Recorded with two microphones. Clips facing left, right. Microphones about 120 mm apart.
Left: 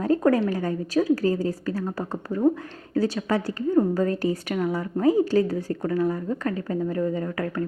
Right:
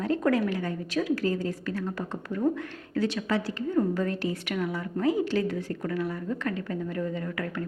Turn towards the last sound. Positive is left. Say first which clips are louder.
# left 5 dB
turn(degrees=35)  # may be behind; listen again after turning